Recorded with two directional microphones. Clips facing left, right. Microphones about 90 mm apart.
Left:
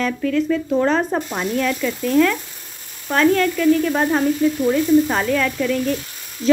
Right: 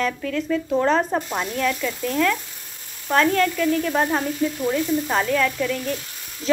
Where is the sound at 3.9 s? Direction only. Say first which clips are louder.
Left 4 dB; 5° left (ahead or behind).